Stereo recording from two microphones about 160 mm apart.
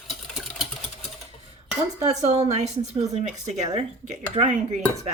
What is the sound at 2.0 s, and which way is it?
Speech, 40° right (ahead or behind).